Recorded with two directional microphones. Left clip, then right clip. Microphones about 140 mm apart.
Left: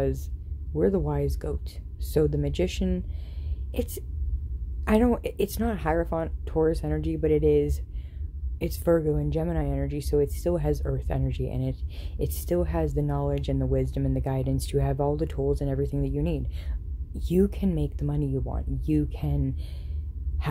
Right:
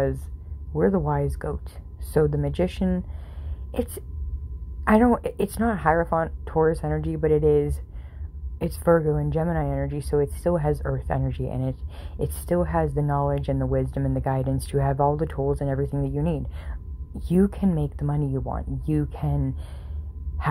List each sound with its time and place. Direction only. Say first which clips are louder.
0.7 s a woman's voice: right 3 dB; 25° left (ahead or behind)